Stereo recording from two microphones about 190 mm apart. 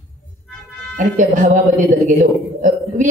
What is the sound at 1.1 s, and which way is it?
A man's voice, 45° right (ahead or behind).